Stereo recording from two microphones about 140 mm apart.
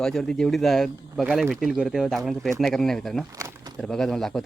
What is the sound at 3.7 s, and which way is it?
Speech, 5° left (ahead or behind).